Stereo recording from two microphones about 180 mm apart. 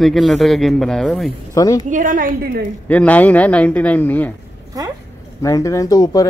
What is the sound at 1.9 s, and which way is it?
Speech, 45° right (ahead or behind).